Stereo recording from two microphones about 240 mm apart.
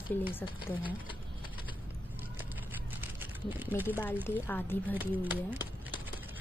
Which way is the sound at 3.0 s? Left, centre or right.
Centre.